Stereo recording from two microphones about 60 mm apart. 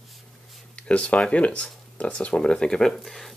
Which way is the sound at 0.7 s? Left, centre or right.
Centre.